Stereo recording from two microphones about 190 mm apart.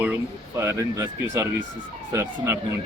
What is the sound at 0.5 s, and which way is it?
Speech, 15° right (ahead or behind).